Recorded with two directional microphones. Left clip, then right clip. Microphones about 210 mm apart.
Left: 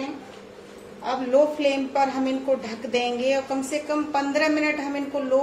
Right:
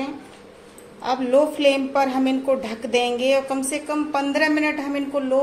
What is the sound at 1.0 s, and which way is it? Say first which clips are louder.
A woman's voice: right 2 dB; 40° right (ahead or behind).